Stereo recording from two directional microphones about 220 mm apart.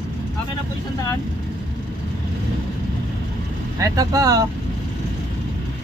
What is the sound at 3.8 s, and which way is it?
Speech, 15° right (ahead or behind).